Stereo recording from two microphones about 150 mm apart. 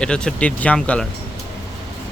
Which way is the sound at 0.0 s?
5° left (ahead or behind).